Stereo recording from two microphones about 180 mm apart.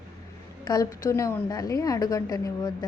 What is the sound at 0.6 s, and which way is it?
A woman's voice, 20° left (ahead or behind).